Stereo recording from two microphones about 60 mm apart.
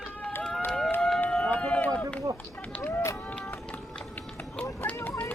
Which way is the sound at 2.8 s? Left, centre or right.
Left.